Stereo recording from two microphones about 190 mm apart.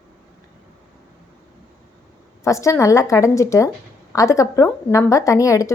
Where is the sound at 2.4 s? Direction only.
15° left (ahead or behind).